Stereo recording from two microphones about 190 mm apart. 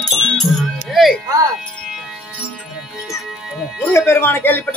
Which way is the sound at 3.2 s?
Centre (ahead or behind).